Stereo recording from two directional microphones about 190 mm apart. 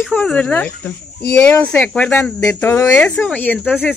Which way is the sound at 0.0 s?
5° left (ahead or behind).